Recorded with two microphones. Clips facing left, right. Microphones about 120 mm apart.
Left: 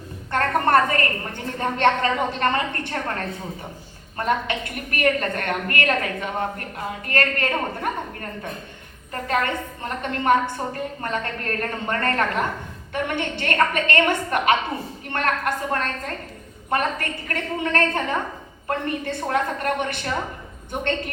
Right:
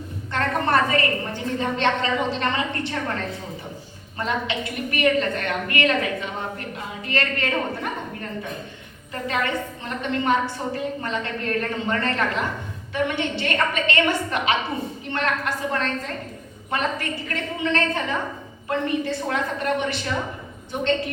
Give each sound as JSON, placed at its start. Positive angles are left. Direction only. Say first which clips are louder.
{"t": 0.3, "sound": "a woman's voice", "louder": "left 3 dB", "side_deg": 50}
{"t": 9.2, "sound": "a woman's voice", "louder": "left 1 dB", "side_deg": 50}